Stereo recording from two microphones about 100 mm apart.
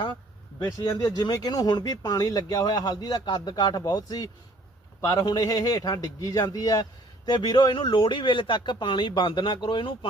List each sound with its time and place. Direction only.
0.6 s a man's voice: 40° left (ahead or behind)